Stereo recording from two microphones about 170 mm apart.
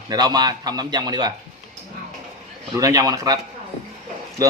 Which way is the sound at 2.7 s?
20° right (ahead or behind).